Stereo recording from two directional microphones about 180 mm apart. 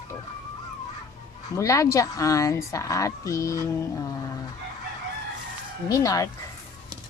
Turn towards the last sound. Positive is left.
turn(degrees=20)  # may be behind; listen again after turning